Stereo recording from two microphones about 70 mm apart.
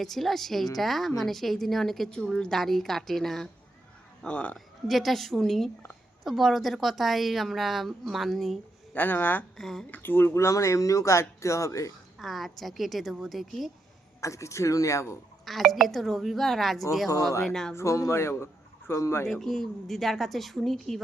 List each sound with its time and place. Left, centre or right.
0.0 s a woman's voice: centre
4.2 s speech: centre
4.5 s a woman's voice: centre
9.0 s speech: left
9.6 s a woman's voice: centre
9.9 s speech: left
12.2 s a woman's voice: centre
14.2 s speech: left
15.4 s a woman's voice: centre
17.7 s speech: left
19.3 s a woman's voice: centre